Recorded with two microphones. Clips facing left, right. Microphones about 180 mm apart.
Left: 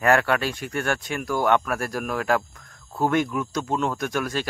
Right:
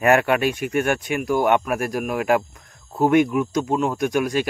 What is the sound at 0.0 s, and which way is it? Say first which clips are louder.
Speech: right 3 dB; 20° right (ahead or behind).